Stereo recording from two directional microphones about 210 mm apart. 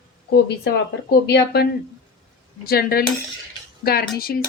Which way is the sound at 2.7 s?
45° left (ahead or behind).